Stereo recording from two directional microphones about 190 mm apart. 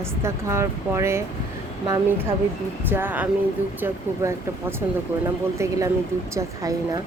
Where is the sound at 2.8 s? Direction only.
10° right (ahead or behind).